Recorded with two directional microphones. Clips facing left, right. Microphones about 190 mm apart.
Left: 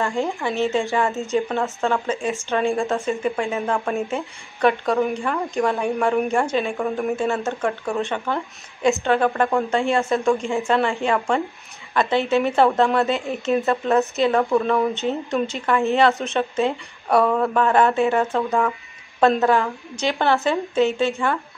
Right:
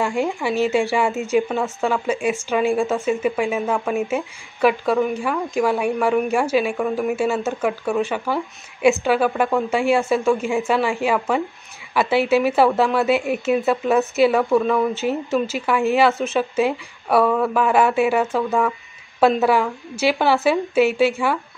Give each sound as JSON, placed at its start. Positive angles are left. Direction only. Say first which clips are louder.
{"t": 0.0, "sound": "a woman's voice", "louder": "right 2 dB", "side_deg": -15}